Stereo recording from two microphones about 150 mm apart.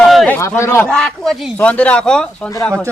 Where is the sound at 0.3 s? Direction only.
15° left (ahead or behind).